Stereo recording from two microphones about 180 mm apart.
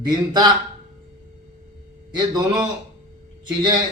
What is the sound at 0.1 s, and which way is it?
Speech, 25° right (ahead or behind).